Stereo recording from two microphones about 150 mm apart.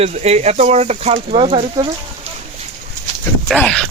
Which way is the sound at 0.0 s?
45° right (ahead or behind).